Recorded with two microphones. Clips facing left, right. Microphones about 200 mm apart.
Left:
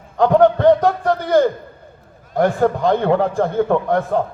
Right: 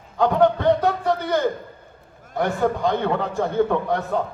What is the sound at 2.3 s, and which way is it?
A man's voice, 50° left (ahead or behind).